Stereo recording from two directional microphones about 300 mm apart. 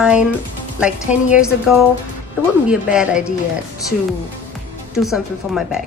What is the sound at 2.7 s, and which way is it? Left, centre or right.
Speech, centre.